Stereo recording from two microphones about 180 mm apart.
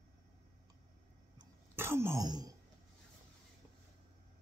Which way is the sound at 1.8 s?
15° right (ahead or behind).